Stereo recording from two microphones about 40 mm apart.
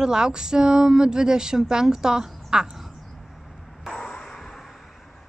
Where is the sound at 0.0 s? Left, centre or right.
Centre.